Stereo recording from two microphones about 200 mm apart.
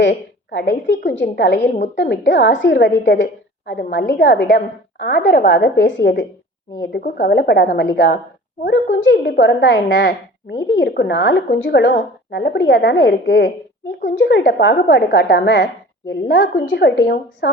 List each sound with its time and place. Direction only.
0.0 s a woman's voice: 60° left (ahead or behind)
8.6 s a woman's voice: 65° left (ahead or behind)